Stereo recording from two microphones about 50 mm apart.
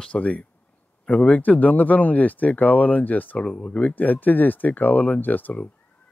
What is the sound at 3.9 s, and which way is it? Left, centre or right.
Speech, left.